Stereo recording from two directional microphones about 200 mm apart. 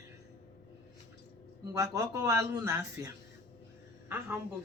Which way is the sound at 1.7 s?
15° right (ahead or behind).